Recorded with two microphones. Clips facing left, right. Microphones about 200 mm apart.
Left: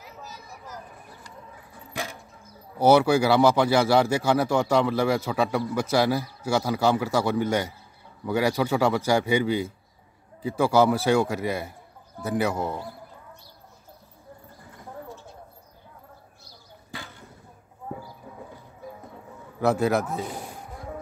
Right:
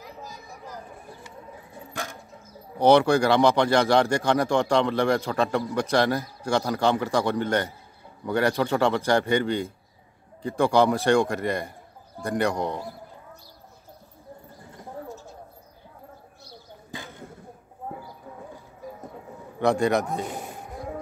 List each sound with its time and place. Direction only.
0.0 s a sound: 15° right (ahead or behind)
2.8 s a man's voice: 5° left (ahead or behind)
19.6 s a man's voice: 5° left (ahead or behind)